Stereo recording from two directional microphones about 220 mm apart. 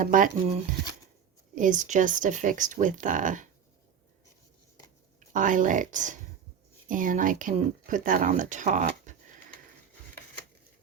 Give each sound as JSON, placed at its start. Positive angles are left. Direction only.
{"t": 0.0, "sound": "speech", "side_deg": -35}
{"t": 1.5, "sound": "speech", "side_deg": -35}
{"t": 5.3, "sound": "speech", "side_deg": -35}